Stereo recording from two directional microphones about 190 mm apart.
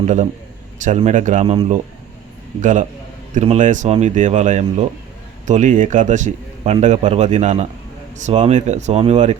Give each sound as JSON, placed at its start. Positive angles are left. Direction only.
{"t": 0.0, "sound": "a man's voice", "side_deg": -40}